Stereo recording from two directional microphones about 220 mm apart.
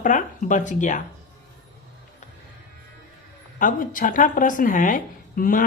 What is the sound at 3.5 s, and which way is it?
A woman's voice, 40° left (ahead or behind).